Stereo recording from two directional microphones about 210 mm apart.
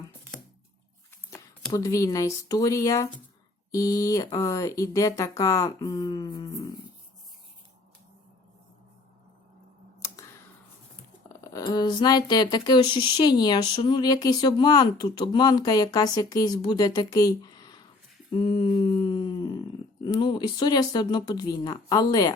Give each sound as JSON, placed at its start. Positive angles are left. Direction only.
{"t": 1.7, "sound": "speech", "side_deg": 15}
{"t": 11.3, "sound": "speech", "side_deg": 15}
{"t": 18.3, "sound": "a sound", "side_deg": 25}
{"t": 20.1, "sound": "speech", "side_deg": 20}